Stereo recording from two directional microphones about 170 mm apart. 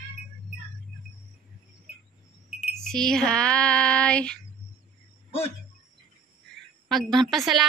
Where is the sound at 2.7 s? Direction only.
5° left (ahead or behind).